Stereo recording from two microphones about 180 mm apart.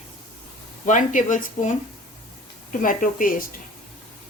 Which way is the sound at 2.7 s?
50° left (ahead or behind).